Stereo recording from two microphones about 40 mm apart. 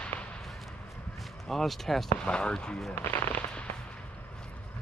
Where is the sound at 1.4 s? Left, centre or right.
Centre.